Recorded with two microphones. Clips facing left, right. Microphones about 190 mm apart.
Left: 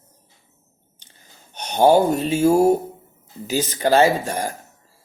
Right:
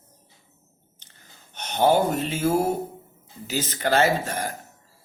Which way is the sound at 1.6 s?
15° left (ahead or behind).